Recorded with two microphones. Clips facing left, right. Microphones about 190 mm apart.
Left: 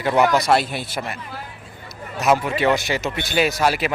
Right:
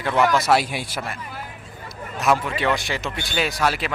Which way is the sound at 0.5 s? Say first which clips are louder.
Left 1 dB; 10° right (ahead or behind).